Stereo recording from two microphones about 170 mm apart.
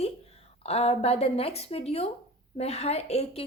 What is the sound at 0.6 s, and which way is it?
A woman's voice, 35° left (ahead or behind).